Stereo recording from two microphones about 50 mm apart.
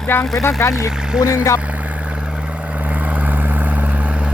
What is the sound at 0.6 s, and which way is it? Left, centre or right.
Speech, left.